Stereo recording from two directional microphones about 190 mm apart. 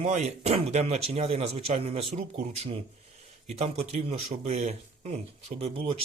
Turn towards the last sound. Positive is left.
turn(degrees=-30)  # may be behind; listen again after turning